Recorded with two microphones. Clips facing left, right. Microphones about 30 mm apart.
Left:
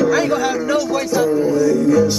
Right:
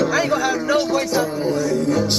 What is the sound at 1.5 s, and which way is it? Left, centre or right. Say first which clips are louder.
Speech: left 4 dB; right.